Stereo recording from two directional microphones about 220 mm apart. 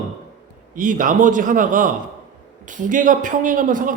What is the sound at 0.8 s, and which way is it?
A man's voice, 35° right (ahead or behind).